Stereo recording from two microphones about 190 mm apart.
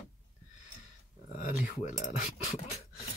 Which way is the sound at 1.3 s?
40° left (ahead or behind).